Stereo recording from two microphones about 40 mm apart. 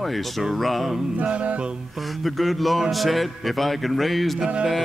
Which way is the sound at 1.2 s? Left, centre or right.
Right.